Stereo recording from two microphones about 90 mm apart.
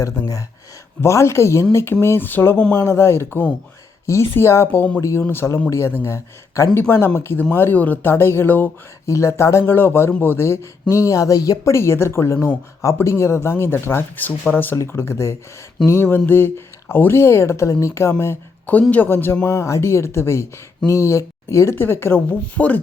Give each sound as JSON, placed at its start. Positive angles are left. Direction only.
{"t": 1.0, "sound": "speech", "side_deg": 30}
{"t": 4.9, "sound": "speech", "side_deg": 35}
{"t": 9.0, "sound": "speech", "side_deg": 30}
{"t": 22.3, "sound": "speech", "side_deg": 15}